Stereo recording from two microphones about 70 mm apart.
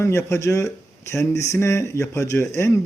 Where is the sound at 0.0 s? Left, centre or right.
Left.